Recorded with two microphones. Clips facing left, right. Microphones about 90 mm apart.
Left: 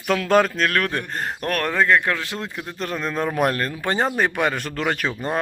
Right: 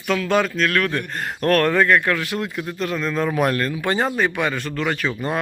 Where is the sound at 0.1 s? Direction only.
45° left (ahead or behind).